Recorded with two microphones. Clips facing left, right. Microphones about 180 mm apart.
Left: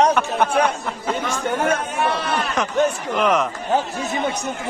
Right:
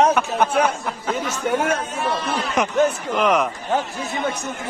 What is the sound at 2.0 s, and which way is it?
Speech, 70° left (ahead or behind).